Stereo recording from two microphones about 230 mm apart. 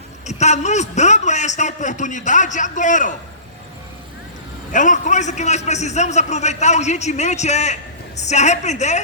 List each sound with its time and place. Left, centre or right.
0.3 s a man's voice: left
4.7 s a man's voice: left